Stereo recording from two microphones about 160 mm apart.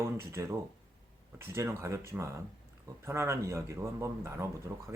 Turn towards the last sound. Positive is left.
turn(degrees=-15)  # may be behind; listen again after turning